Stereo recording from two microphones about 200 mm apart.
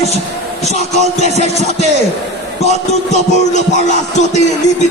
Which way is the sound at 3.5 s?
35° left (ahead or behind).